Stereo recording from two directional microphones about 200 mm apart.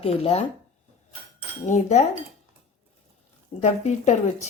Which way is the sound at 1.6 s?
35° left (ahead or behind).